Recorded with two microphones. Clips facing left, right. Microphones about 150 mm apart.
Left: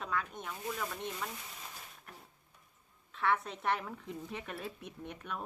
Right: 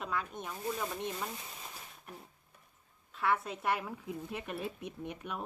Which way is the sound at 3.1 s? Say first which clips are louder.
Even; centre (ahead or behind).